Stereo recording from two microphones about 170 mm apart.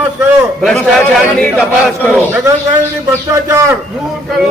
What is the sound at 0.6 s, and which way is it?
Speech, centre (ahead or behind).